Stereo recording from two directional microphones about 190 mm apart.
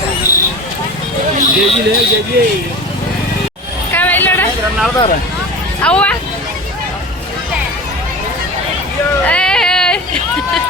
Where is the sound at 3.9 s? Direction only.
10° left (ahead or behind).